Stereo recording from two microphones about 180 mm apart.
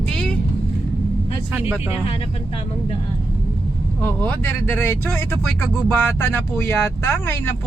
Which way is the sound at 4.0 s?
10° left (ahead or behind).